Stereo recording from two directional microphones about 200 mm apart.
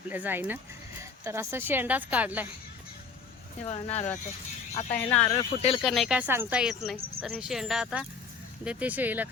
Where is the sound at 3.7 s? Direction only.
35° left (ahead or behind).